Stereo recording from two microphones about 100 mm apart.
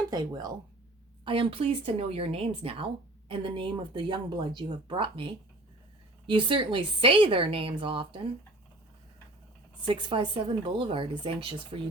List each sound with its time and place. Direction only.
0.1 s speech: 45° right (ahead or behind)
1.2 s speech: 60° right (ahead or behind)
9.8 s speech: 55° right (ahead or behind)